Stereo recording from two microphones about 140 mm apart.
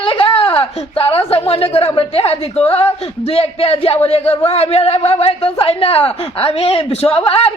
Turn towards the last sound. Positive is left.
turn(degrees=45)  # may be behind; listen again after turning